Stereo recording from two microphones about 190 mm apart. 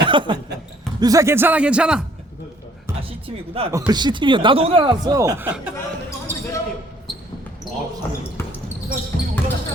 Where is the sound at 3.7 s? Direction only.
20° right (ahead or behind).